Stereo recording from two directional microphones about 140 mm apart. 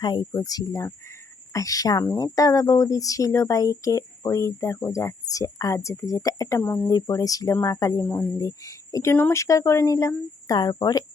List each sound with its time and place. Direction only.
0.0 s speech: 30° left (ahead or behind)
6.6 s speech: 10° left (ahead or behind)
6.8 s speech: 25° left (ahead or behind)